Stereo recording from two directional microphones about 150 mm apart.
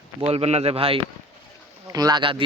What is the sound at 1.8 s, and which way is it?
Speech, 25° right (ahead or behind).